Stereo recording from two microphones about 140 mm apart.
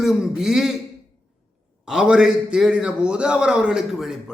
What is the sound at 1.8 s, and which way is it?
A man's voice, 5° right (ahead or behind).